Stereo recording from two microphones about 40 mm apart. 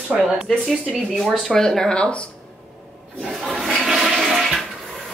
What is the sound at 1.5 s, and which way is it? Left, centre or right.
Speech, centre.